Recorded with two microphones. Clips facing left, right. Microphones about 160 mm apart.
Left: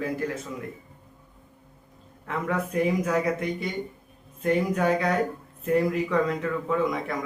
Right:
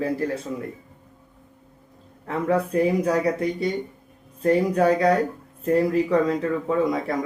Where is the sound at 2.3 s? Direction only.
35° right (ahead or behind).